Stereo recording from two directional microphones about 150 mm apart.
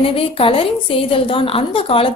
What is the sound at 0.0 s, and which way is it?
A woman's voice, 40° left (ahead or behind).